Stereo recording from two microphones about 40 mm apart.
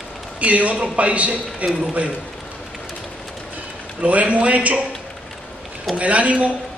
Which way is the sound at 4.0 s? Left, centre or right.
Right.